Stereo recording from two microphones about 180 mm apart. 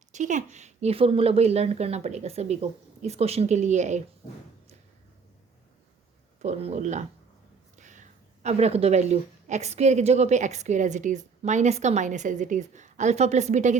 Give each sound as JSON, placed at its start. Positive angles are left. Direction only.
{"t": 0.1, "sound": "a woman's voice", "side_deg": -45}
{"t": 6.4, "sound": "a woman's voice", "side_deg": -40}